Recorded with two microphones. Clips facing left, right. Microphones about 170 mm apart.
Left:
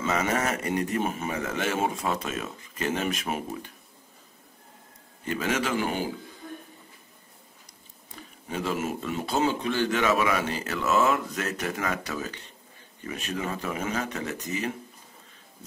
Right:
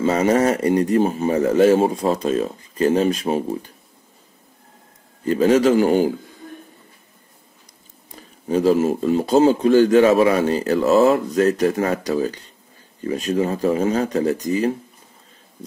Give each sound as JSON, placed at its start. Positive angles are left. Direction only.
{"t": 0.0, "sound": "speech", "side_deg": -35}
{"t": 5.2, "sound": "speech", "side_deg": -35}
{"t": 8.2, "sound": "speech", "side_deg": -35}